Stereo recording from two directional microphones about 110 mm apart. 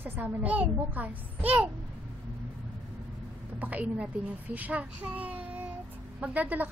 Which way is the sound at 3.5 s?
15° right (ahead or behind).